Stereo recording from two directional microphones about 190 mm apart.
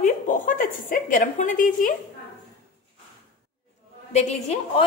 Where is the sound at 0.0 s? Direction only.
45° left (ahead or behind).